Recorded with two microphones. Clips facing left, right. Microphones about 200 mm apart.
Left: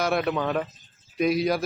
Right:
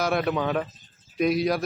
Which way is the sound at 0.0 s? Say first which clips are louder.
Even; centre (ahead or behind).